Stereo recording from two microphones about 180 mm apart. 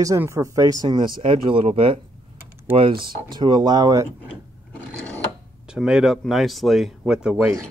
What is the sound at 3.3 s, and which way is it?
Speech, 25° right (ahead or behind).